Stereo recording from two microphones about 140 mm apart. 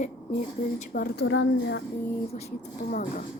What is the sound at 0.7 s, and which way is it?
Speech, 90° left.